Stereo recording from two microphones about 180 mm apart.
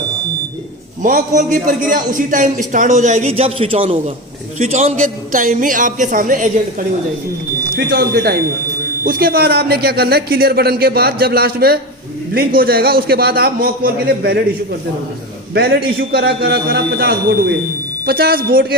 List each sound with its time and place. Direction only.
1.0 s a man's voice: 45° right (ahead or behind)
7.8 s a man's voice: 65° right (ahead or behind)